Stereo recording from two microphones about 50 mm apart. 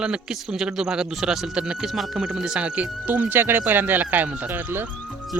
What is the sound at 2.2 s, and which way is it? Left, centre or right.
Speech, centre.